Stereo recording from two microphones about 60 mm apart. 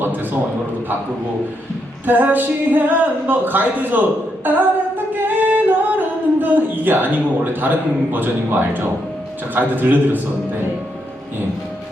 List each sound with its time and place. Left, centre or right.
0.0 s a man's voice: right
2.0 s speech: right
5.1 s music: right
8.1 s speech: right